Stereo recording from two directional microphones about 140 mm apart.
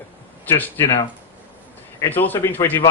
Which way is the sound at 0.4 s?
15° left (ahead or behind).